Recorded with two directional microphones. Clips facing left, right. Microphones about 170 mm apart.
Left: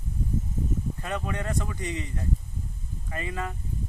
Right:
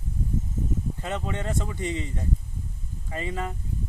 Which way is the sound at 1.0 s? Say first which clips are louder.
Right 1 dB; 25° right (ahead or behind).